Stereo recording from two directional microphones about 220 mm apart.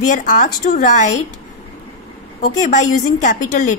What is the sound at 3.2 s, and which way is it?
Speech, 35° left (ahead or behind).